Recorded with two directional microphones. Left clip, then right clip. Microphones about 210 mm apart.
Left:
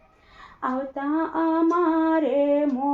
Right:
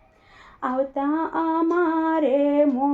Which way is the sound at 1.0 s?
40° right (ahead or behind).